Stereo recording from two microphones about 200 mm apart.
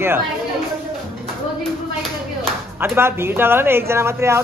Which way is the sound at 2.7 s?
10° right (ahead or behind).